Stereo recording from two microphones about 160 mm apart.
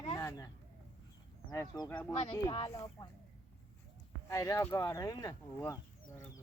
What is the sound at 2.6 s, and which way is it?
Speech, 20° left (ahead or behind).